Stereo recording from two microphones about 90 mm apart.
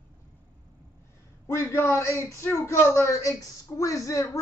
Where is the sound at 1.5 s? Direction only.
30° left (ahead or behind).